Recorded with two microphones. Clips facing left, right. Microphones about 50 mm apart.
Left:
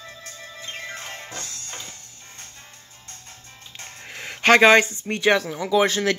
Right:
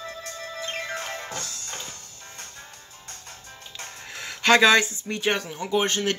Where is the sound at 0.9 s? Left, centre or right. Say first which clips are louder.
Right 3 dB; right.